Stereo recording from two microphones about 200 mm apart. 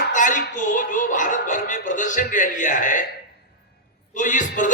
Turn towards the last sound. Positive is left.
turn(degrees=40)  # may be behind; listen again after turning